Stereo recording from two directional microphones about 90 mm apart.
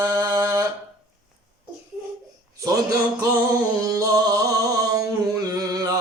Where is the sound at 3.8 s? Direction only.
40° right (ahead or behind).